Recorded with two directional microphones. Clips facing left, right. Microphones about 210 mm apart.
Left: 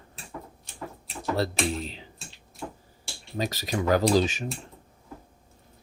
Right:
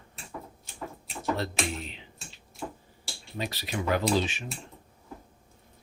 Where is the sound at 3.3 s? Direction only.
40° left (ahead or behind).